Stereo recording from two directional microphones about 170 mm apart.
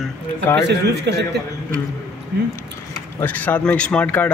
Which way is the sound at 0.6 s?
85° right.